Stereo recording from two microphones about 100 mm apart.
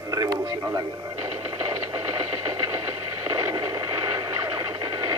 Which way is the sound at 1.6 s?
35° right (ahead or behind).